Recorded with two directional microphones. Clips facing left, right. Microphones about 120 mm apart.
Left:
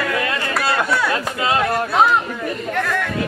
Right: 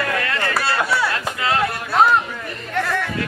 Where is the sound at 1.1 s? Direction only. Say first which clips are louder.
Left 2 dB; 20° left (ahead or behind).